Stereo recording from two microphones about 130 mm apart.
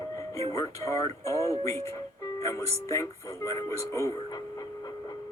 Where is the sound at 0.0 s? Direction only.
25° left (ahead or behind).